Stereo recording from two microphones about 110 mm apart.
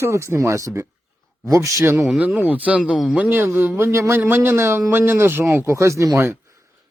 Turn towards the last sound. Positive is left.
turn(degrees=-30)  # may be behind; listen again after turning